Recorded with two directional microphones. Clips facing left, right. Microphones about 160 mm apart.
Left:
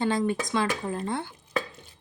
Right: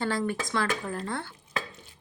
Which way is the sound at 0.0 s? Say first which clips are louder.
Left 3 dB; 20° left (ahead or behind).